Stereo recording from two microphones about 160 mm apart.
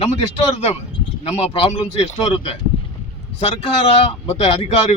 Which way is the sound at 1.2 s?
40° left (ahead or behind).